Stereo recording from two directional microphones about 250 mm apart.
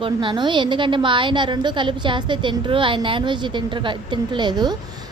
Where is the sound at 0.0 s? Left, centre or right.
Centre.